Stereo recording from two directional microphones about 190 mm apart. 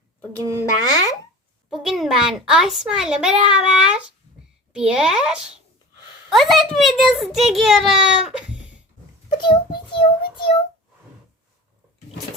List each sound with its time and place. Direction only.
0.6 s a child's voice: 20° left (ahead or behind)
1.7 s a child's voice: centre (ahead or behind)
9.4 s a child's voice: 25° left (ahead or behind)